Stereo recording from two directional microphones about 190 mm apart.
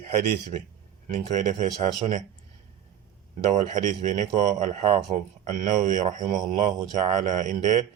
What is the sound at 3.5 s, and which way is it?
Speech, 40° right (ahead or behind).